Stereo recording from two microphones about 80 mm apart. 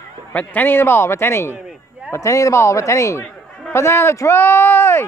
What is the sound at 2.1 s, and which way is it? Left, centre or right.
Speech, left.